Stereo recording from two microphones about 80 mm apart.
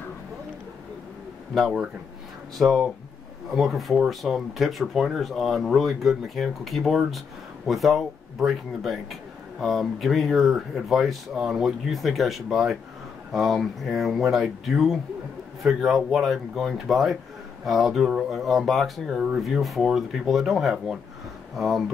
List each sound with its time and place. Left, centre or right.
1.5 s speech: centre